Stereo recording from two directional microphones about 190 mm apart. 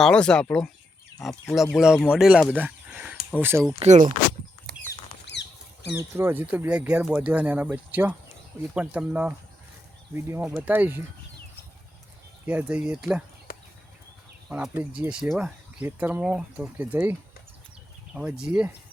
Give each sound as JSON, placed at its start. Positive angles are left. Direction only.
{"t": 0.0, "sound": "speech", "side_deg": 5}
{"t": 2.6, "sound": "a sound", "side_deg": -10}
{"t": 3.8, "sound": "speech", "side_deg": -40}
{"t": 5.2, "sound": "rodents", "side_deg": 65}
{"t": 5.9, "sound": "speech", "side_deg": -10}
{"t": 12.5, "sound": "speech", "side_deg": -10}
{"t": 13.5, "sound": "a sound", "side_deg": 50}
{"t": 14.5, "sound": "speech", "side_deg": -10}